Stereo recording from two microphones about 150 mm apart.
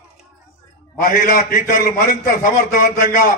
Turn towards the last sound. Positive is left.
turn(degrees=70)  # may be behind; listen again after turning